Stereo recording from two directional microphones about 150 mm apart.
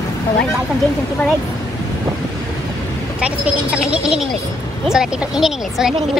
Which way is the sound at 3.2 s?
5° right (ahead or behind).